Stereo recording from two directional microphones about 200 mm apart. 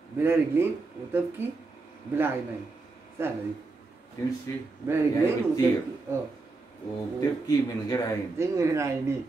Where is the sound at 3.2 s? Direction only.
10° right (ahead or behind).